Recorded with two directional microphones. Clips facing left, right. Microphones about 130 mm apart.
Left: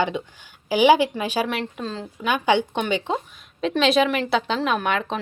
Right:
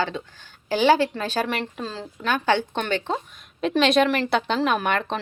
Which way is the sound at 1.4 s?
Centre (ahead or behind).